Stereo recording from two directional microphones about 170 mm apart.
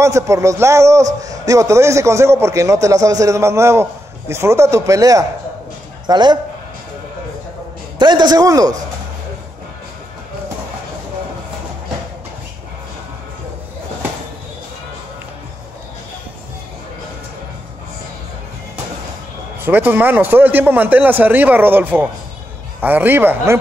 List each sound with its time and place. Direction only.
0.0 s a man's voice: 15° right (ahead or behind)
8.0 s a man's voice: 25° right (ahead or behind)
19.6 s a man's voice: 10° right (ahead or behind)